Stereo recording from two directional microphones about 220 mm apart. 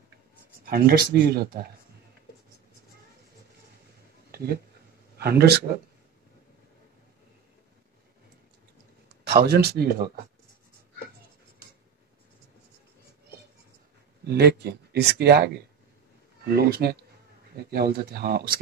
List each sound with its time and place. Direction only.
0.7 s speech: 45° right (ahead or behind)
5.1 s speech: 45° right (ahead or behind)
9.1 s speech: 50° right (ahead or behind)
14.2 s speech: 45° right (ahead or behind)